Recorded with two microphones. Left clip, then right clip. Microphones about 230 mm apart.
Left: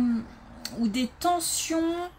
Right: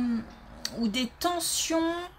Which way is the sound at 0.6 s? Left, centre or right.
Right.